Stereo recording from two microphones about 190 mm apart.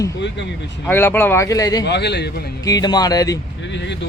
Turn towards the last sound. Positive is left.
turn(degrees=20)  # may be behind; listen again after turning